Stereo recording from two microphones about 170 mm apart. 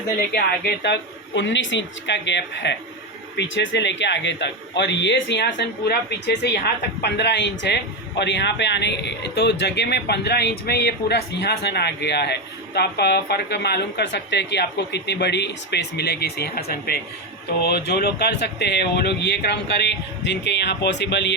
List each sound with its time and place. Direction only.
0.3 s speech: 75° left (ahead or behind)
1.4 s speech: 90° left